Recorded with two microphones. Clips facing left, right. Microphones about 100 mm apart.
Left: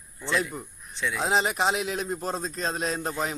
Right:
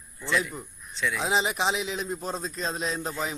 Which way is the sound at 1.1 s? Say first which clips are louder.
Left 2 dB; centre (ahead or behind).